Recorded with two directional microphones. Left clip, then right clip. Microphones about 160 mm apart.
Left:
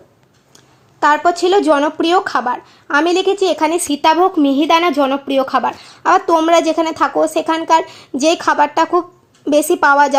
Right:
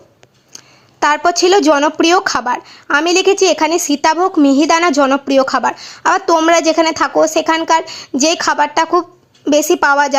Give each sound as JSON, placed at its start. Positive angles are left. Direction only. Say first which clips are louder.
{"t": 0.9, "sound": "a woman's voice", "louder": "even", "side_deg": -20}